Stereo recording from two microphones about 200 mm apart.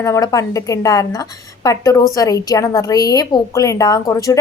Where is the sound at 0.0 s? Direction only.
15° left (ahead or behind).